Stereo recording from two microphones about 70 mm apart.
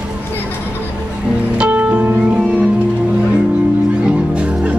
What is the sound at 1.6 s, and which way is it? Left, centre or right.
Music, centre.